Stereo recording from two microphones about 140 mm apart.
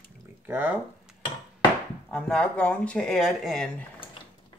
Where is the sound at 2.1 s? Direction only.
5° left (ahead or behind).